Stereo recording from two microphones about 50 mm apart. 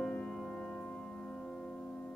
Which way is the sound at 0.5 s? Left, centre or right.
Left.